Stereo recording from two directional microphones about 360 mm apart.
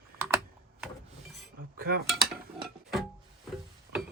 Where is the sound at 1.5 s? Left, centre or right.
Right.